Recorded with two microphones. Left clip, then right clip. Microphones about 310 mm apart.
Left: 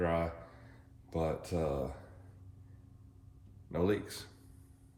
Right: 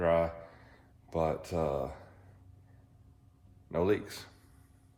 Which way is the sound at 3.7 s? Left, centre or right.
Right.